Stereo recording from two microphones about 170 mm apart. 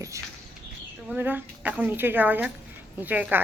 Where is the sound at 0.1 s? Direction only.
15° right (ahead or behind).